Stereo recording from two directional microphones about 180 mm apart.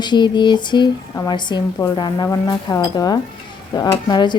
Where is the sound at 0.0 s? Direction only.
25° left (ahead or behind).